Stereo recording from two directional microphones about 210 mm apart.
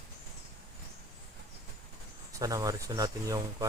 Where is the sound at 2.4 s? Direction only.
15° right (ahead or behind).